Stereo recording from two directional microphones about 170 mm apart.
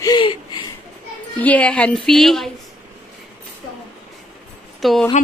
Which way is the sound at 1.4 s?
10° left (ahead or behind).